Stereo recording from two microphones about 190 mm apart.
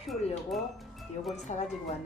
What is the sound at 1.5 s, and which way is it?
Speech, 40° left (ahead or behind).